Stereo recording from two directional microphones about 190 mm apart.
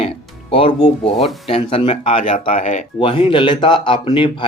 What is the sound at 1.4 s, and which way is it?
Speech, 30° left (ahead or behind).